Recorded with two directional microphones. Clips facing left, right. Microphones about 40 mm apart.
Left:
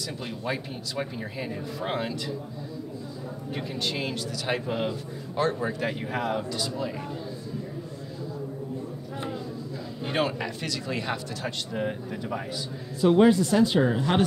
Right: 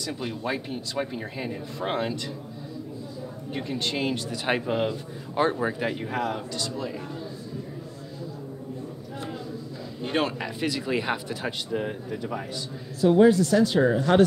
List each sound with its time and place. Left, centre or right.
0.0 s speech: centre
3.5 s speech: centre
4.1 s speech: right
4.6 s speech: centre
5.9 s speech: centre
10.0 s speech: centre
10.6 s speech: centre
11.7 s speech: centre
13.0 s speech: left; by 14.2 s centre